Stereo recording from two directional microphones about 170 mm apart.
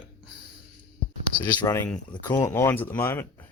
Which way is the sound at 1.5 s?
20° left (ahead or behind).